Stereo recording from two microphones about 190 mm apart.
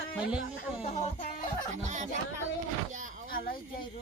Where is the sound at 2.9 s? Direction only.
45° right (ahead or behind).